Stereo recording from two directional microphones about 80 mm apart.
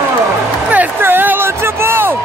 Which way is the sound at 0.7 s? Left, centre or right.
Right.